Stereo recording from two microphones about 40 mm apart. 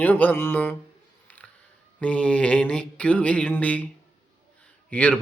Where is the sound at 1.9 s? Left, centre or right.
Left.